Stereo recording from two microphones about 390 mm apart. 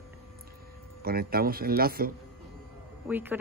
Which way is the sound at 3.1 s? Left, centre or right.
Centre.